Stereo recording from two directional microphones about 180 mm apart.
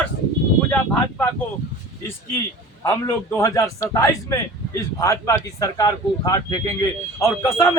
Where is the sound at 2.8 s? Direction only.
15° left (ahead or behind).